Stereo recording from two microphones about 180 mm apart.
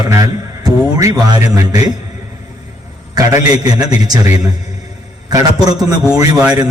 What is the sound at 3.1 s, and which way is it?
Speech, 20° right (ahead or behind).